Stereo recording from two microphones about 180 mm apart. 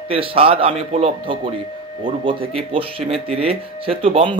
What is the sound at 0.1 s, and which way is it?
Speech, 30° right (ahead or behind).